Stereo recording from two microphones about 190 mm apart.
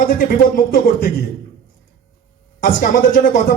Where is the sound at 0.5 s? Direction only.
50° left (ahead or behind).